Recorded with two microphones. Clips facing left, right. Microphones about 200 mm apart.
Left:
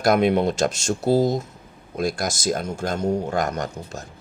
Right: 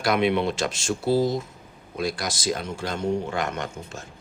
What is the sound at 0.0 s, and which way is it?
Speech, 45° left (ahead or behind).